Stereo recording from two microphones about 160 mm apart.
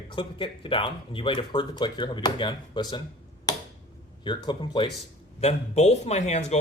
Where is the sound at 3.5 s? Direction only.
25° left (ahead or behind).